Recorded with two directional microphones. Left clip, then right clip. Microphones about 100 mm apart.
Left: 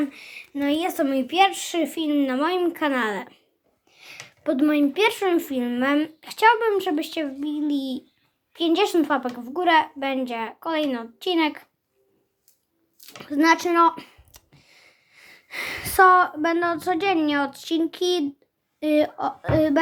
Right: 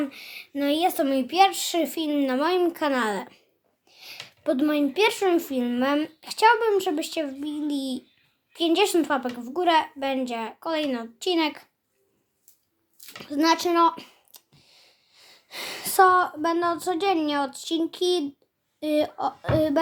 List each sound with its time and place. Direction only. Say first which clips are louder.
0.0 s speech: left 2 dB; 25° right (ahead or behind)
0.8 s speech: right 1 dB; 15° right (ahead or behind)
3.8 s a sound: right 1 dB; 20° right (ahead or behind)
4.3 s speech: left 2 dB; 20° right (ahead or behind)
13.1 s a child's voice: left 3 dB; 15° right (ahead or behind)
14.3 s a sound: left 1 dB; centre (ahead or behind)
17.2 s speech: left 3 dB; 5° right (ahead or behind)